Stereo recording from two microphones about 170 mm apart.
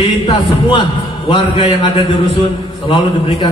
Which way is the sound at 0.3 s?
30° left (ahead or behind).